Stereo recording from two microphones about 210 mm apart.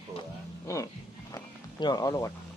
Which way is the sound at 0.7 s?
15° left (ahead or behind).